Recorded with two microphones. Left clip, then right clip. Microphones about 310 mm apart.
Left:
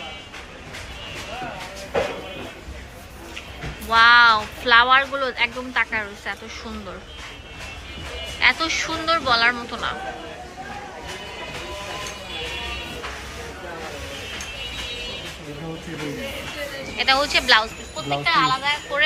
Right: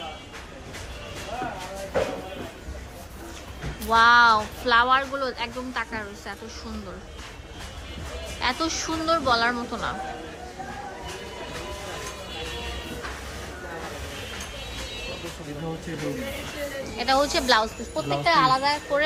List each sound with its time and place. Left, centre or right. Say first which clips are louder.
3.8 s speech: left 3 dB; centre
8.4 s speech: left 7 dB; centre
17.0 s speech: left 4 dB; centre